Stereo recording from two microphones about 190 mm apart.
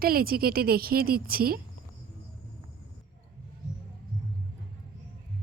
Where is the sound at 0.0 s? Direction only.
50° right (ahead or behind).